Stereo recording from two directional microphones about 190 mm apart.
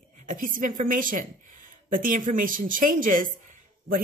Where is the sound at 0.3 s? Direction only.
45° right (ahead or behind).